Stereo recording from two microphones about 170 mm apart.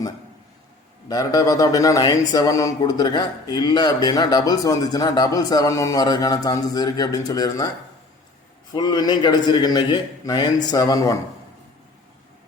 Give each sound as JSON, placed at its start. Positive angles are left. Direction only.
{"t": 1.0, "sound": "speech", "side_deg": 20}
{"t": 8.7, "sound": "speech", "side_deg": 25}